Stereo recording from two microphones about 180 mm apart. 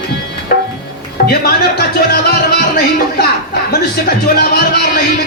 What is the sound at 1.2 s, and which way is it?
Music, 60° left (ahead or behind).